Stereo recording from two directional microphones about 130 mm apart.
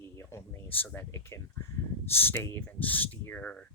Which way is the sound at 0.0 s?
20° left (ahead or behind).